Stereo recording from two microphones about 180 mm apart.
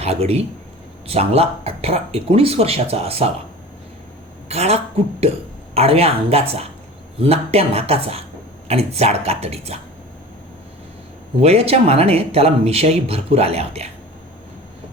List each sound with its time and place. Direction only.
0.0 s speech: 35° right (ahead or behind)
4.4 s speech: 35° right (ahead or behind)
11.4 s speech: 35° right (ahead or behind)